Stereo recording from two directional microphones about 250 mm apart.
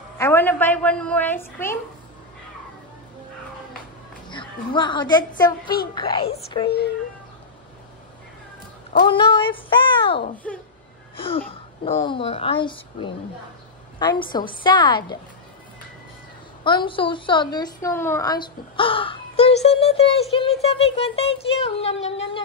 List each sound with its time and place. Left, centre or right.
0.2 s a woman's voice: centre
4.3 s a woman's voice: centre
9.0 s a woman's voice: centre
10.3 s a child's voice: centre
11.1 s a woman's voice: left
16.6 s a woman's voice: centre